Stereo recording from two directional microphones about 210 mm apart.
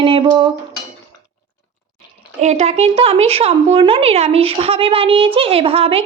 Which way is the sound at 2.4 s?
30° right (ahead or behind).